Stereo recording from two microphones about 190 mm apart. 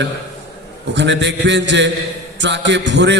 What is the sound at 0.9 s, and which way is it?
A man's voice, 65° right (ahead or behind).